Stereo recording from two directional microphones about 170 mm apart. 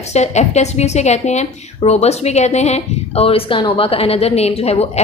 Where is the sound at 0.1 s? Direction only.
40° left (ahead or behind).